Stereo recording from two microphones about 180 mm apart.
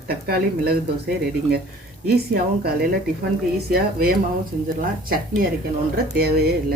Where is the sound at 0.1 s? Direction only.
60° right (ahead or behind).